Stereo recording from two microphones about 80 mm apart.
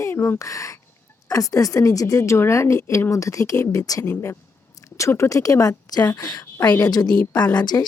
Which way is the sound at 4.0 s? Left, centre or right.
Left.